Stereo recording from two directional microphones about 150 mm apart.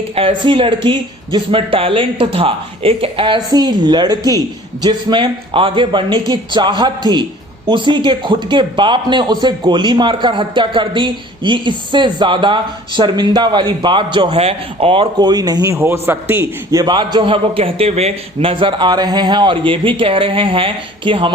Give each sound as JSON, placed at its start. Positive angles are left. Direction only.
{"t": 0.2, "sound": "a man's voice", "side_deg": -35}
{"t": 16.8, "sound": "speech", "side_deg": -30}